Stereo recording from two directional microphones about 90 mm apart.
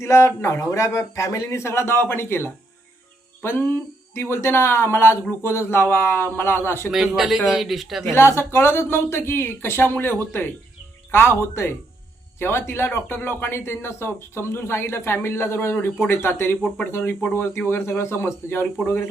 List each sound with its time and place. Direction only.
0.0 s speech: 30° left (ahead or behind)
6.9 s a man's voice: 5° right (ahead or behind)
8.1 s speech: 25° left (ahead or behind)